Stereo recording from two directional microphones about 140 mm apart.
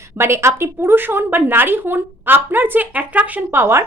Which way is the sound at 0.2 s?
20° right (ahead or behind).